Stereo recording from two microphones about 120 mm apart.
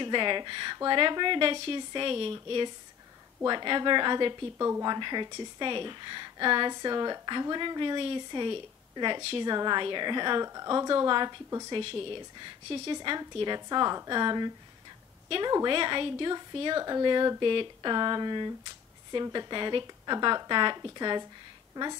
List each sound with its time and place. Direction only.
0.0 s a woman's voice: 40° right (ahead or behind)